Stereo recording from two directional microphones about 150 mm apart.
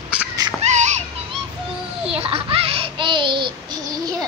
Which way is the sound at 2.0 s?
40° right (ahead or behind).